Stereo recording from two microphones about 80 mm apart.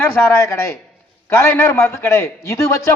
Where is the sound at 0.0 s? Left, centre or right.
Left.